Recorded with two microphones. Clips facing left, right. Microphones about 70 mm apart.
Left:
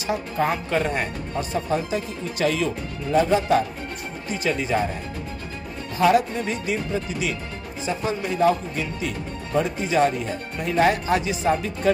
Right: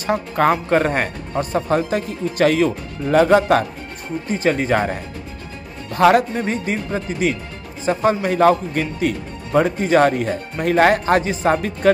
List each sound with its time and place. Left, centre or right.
0.5 s speech: right
4.3 s speech: right
5.9 s speech: right